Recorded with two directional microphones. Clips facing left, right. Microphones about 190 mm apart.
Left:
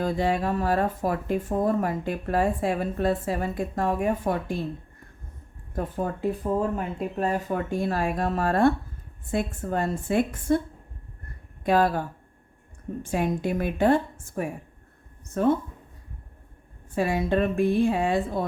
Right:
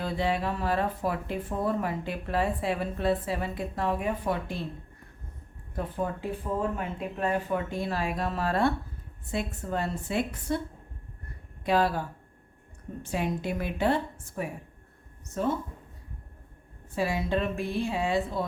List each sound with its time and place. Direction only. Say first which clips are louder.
0.0 s speech: left 4 dB; 45° left (ahead or behind)
5.7 s speech: left 3 dB; 45° left (ahead or behind)
11.6 s speech: left 3 dB; 50° left (ahead or behind)
16.9 s speech: left 4 dB; 50° left (ahead or behind)